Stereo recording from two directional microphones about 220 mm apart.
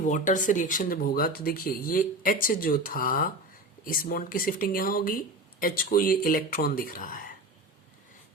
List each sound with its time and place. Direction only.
0.0 s speech: 35° left (ahead or behind)